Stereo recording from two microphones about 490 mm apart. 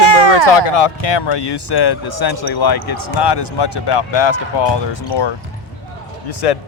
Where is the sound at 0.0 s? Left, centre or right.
Right.